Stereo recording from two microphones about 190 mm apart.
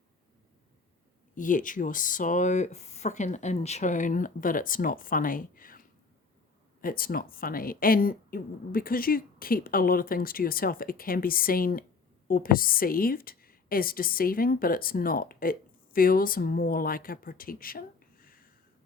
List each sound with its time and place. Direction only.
1.4 s speech: 45° left (ahead or behind)
6.8 s a woman's voice: 50° left (ahead or behind)